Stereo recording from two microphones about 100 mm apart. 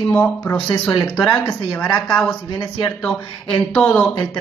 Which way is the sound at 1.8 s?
10° left (ahead or behind).